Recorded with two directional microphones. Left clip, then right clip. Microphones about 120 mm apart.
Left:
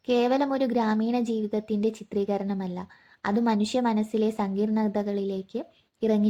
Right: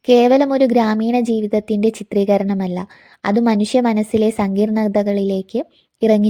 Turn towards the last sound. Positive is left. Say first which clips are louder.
# right 11 dB
turn(degrees=-70)  # may be behind; listen again after turning